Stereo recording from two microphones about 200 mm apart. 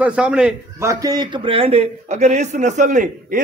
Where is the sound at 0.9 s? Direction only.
20° right (ahead or behind).